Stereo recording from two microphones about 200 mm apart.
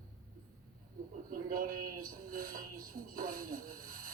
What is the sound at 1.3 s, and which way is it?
Speech, 45° right (ahead or behind).